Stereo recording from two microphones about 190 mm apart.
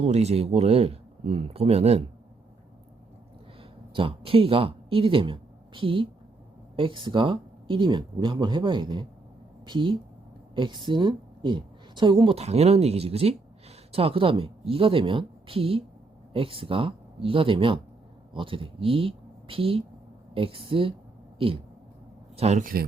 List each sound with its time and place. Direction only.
0.0 s speech: 35° right (ahead or behind)
3.6 s a woman's voice: 30° right (ahead or behind); by 22.9 s 50° right (ahead or behind)